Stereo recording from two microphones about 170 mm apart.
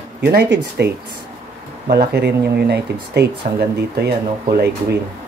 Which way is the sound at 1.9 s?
70° right (ahead or behind).